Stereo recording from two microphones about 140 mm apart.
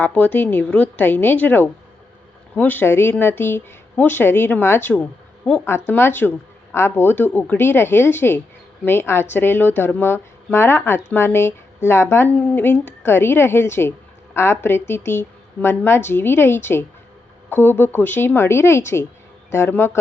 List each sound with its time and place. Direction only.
0.0 s speech: 10° left (ahead or behind)